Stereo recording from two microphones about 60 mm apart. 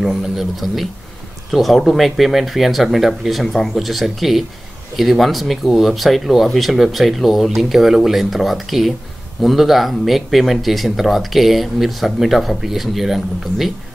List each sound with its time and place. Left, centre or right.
0.0 s speech: centre